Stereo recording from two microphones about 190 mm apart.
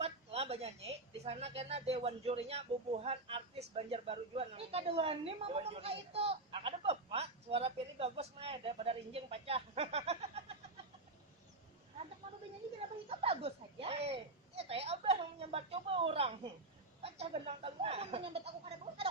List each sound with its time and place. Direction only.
0.0 s a sound: 30° right (ahead or behind)
1.2 s speech: 35° right (ahead or behind)
13.1 s speech: 30° right (ahead or behind)